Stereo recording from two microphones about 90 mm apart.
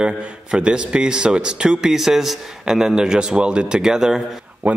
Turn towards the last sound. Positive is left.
turn(degrees=-20)  # may be behind; listen again after turning